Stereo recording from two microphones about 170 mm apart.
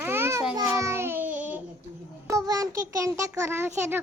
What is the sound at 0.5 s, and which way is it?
Child singing, 20° right (ahead or behind).